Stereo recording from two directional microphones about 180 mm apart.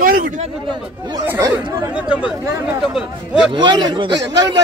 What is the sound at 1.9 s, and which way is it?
Speech, 5° right (ahead or behind).